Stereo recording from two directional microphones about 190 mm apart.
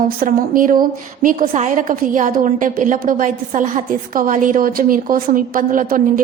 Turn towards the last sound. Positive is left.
turn(degrees=-45)  # may be behind; listen again after turning